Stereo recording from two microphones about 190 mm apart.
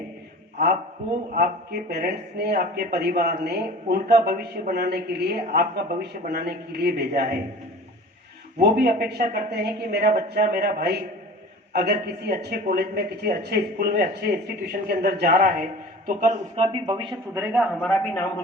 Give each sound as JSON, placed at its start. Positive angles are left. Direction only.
{"t": 1.3, "sound": "speech", "side_deg": -55}
{"t": 8.5, "sound": "speech", "side_deg": -55}
{"t": 16.0, "sound": "a man's voice", "side_deg": -40}
{"t": 17.3, "sound": "a man's voice", "side_deg": -10}
{"t": 17.7, "sound": "a man's voice", "side_deg": 5}